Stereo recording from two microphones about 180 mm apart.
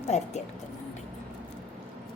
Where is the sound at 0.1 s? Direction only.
40° left (ahead or behind).